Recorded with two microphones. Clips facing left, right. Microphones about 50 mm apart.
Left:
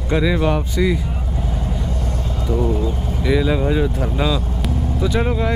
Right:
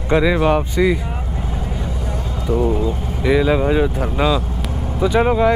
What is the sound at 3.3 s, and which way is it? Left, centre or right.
Speech, right.